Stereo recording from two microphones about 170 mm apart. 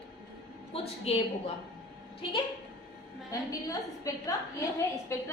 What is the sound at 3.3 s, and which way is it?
A woman's voice, 20° left (ahead or behind).